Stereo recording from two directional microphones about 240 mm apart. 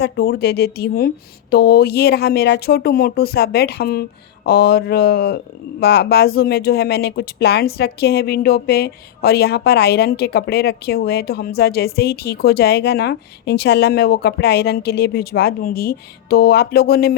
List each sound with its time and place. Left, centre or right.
0.0 s speech: left